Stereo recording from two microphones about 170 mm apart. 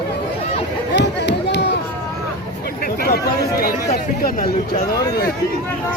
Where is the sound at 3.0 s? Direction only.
60° left (ahead or behind).